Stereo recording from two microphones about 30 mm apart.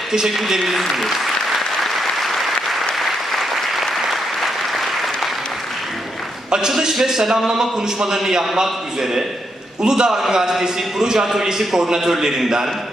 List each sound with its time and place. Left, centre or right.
0.1 s a man's voice: centre
0.7 s speech: centre
1.5 s applause: centre
6.7 s a man's voice: centre